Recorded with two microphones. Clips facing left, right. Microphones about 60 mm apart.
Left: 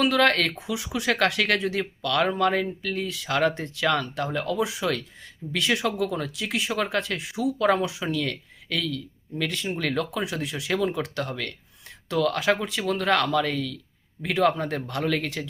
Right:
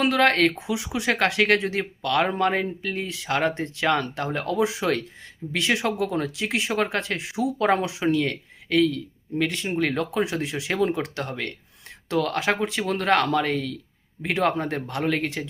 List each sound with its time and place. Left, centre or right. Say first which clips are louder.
0.0 s speech: right 1 dB; right